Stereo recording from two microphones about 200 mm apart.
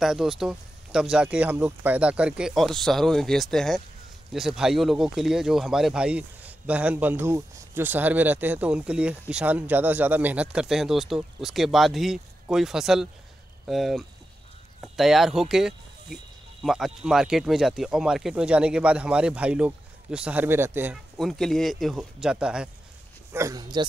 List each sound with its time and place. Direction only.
0.0 s speech: centre (ahead or behind)
23.3 s speech: 15° right (ahead or behind)